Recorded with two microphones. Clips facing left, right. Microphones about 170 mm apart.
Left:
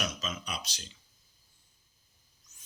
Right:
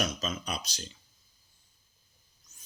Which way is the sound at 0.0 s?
40° right (ahead or behind).